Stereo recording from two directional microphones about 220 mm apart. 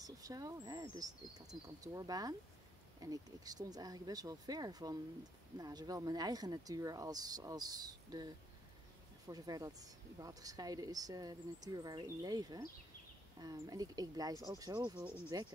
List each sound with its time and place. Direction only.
0.0 s speech: 15° right (ahead or behind)
9.3 s speech: 15° right (ahead or behind)